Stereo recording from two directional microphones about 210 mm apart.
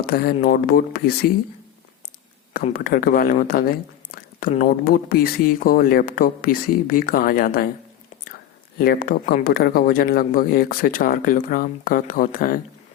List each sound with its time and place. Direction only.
0.0 s speech: 45° left (ahead or behind)
2.6 s speech: 40° left (ahead or behind)
8.8 s speech: 45° left (ahead or behind)